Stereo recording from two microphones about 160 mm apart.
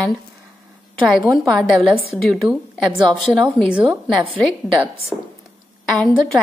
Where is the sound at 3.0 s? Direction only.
30° right (ahead or behind).